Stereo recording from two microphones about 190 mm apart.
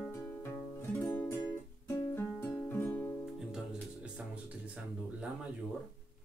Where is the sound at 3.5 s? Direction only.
5° right (ahead or behind).